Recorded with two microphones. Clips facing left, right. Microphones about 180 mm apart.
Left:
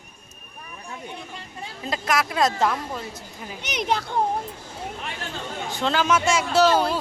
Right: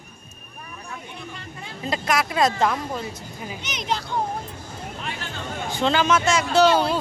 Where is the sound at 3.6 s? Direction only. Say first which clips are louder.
Left 4 dB; 60° left (ahead or behind).